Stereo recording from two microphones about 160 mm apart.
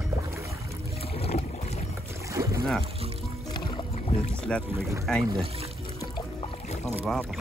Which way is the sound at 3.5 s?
30° left (ahead or behind).